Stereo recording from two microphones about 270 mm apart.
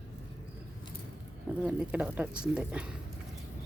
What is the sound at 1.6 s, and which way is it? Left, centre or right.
Speech, centre.